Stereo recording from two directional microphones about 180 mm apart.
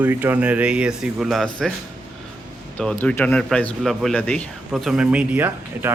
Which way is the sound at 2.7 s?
5° left (ahead or behind).